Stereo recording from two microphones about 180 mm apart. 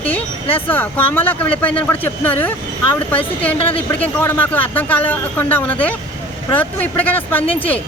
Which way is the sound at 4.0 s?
10° left (ahead or behind).